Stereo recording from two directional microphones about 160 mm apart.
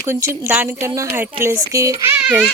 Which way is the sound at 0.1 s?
15° right (ahead or behind).